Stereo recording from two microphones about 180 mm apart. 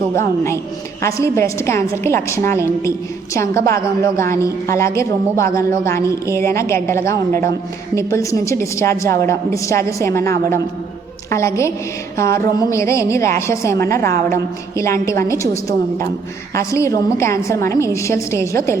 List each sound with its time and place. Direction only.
0.1 s speech: 15° left (ahead or behind)
16.6 s speech: 15° left (ahead or behind)